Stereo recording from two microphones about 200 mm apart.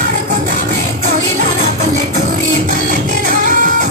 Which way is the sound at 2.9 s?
45° right (ahead or behind).